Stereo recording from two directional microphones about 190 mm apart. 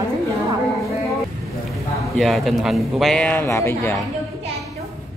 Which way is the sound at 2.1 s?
Centre (ahead or behind).